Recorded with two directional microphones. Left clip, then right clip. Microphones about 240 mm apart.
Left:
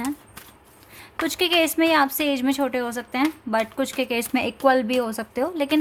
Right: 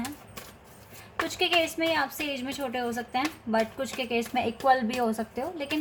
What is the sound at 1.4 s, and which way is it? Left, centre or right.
A woman's voice, left.